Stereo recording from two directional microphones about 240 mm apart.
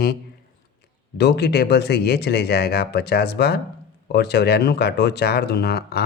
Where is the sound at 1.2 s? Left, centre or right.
Left.